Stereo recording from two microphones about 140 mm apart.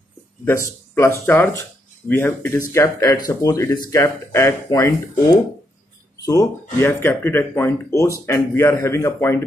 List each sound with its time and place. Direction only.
0.5 s speech: 15° left (ahead or behind)
6.2 s speech: 20° left (ahead or behind)